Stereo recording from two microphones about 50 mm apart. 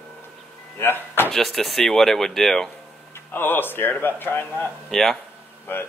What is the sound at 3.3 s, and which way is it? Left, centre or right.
Speech, left.